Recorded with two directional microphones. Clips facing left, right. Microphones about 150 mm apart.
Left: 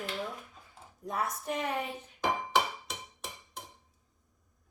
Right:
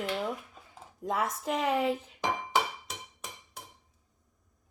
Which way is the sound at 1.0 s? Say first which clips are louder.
Right 3 dB; 90° right.